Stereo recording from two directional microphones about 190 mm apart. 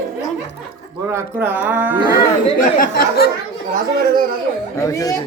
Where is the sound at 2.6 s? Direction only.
45° left (ahead or behind).